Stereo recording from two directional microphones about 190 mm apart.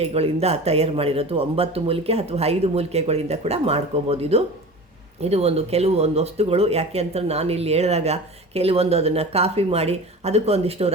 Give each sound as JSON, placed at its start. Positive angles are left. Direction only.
{"t": 0.0, "sound": "speech", "side_deg": -35}